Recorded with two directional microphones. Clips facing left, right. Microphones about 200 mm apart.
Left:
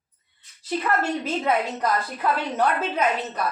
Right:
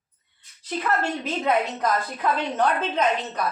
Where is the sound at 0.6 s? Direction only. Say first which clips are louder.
Left 1 dB; 10° left (ahead or behind).